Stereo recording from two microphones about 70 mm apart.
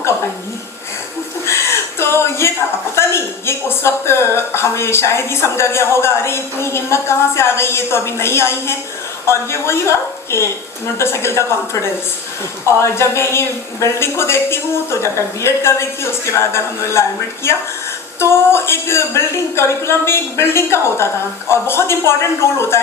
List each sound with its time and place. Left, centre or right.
1.5 s a sound: left
2.9 s a woman's voice: left
10.9 s a woman's voice: left